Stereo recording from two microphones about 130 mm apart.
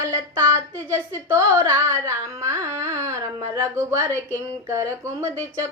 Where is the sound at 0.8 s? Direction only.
20° right (ahead or behind).